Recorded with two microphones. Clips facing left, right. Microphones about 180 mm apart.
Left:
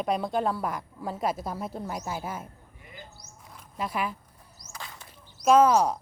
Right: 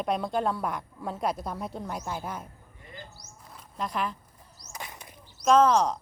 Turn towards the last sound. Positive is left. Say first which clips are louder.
# left 1 dB
turn(degrees=10)  # may be behind; listen again after turning